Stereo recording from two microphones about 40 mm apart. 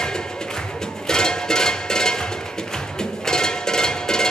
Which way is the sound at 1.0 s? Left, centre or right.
Centre.